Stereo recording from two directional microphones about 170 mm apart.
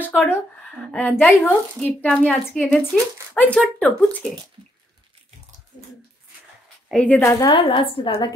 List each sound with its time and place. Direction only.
0.0 s speech: 10° left (ahead or behind)
6.9 s a woman's voice: 10° left (ahead or behind); by 8.3 s 30° left (ahead or behind)